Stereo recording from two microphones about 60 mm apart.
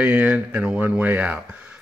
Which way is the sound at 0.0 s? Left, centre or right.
Right.